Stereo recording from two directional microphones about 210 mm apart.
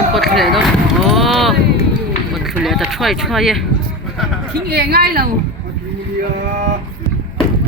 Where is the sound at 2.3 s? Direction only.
Centre (ahead or behind).